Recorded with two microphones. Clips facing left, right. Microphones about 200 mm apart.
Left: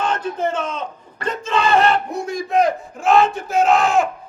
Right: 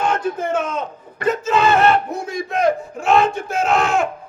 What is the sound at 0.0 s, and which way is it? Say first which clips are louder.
Speech: right 1 dB; 10° right (ahead or behind).